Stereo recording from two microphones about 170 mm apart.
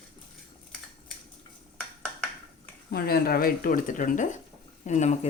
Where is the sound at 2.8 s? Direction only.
65° left (ahead or behind).